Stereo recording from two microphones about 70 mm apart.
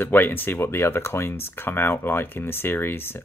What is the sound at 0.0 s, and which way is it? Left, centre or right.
Speech, left.